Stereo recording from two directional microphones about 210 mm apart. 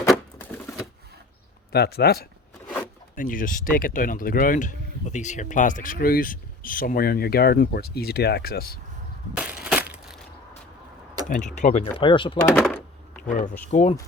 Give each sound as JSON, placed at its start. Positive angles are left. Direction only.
{"t": 0.1, "sound": "typewriter", "side_deg": 5}
{"t": 1.7, "sound": "speech", "side_deg": 50}
{"t": 9.3, "sound": "crushing", "side_deg": -5}
{"t": 9.6, "sound": "crumpling", "side_deg": -5}
{"t": 11.3, "sound": "speech", "side_deg": 35}
{"t": 12.5, "sound": "a sound", "side_deg": 5}
{"t": 13.2, "sound": "speech", "side_deg": 35}